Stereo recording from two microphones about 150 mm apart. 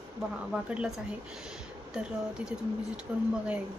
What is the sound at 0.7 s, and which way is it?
Speech, 5° right (ahead or behind).